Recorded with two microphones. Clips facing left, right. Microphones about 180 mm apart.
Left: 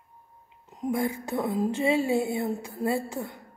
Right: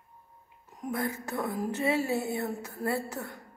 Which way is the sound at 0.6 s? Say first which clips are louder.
Left 5 dB; 20° left (ahead or behind).